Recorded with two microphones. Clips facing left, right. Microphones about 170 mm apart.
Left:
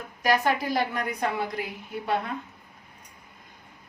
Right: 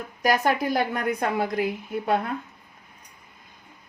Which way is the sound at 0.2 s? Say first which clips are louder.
Right 2 dB; 40° right (ahead or behind).